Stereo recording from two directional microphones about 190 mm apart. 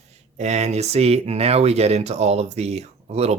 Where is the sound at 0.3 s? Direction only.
35° right (ahead or behind).